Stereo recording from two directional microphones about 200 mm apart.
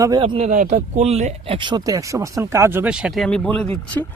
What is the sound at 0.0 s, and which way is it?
Speech, 20° right (ahead or behind).